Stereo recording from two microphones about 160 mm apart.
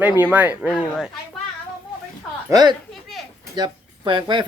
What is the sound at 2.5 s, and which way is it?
Speech, 25° right (ahead or behind).